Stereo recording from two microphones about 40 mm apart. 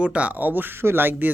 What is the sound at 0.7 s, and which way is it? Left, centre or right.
Speech, right.